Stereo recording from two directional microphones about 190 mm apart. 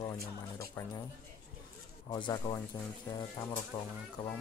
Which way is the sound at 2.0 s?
25° left (ahead or behind).